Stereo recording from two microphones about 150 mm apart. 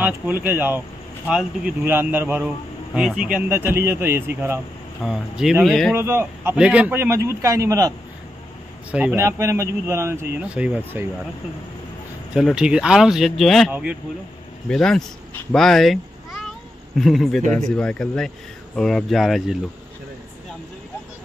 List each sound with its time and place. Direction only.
0.0 s a man's voice: 10° right (ahead or behind)
5.0 s speech: centre (ahead or behind)
5.9 s a man's voice: 15° right (ahead or behind)
9.1 s a man's voice: 20° right (ahead or behind)
12.4 s speech: 5° right (ahead or behind)
13.7 s a man's voice: 10° right (ahead or behind)
14.7 s speech: 5° left (ahead or behind)
15.5 s meow: centre (ahead or behind)
17.0 s speech: centre (ahead or behind)